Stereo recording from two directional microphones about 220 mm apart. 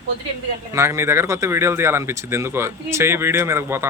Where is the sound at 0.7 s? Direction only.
10° right (ahead or behind).